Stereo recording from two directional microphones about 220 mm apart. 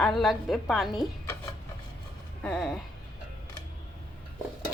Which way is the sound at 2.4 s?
5° left (ahead or behind).